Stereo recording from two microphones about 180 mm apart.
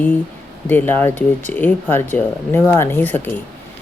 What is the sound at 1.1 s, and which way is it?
Speech, 40° right (ahead or behind).